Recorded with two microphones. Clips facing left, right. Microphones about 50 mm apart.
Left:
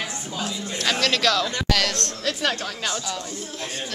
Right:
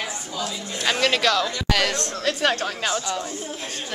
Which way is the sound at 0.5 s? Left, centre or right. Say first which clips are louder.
Even; centre.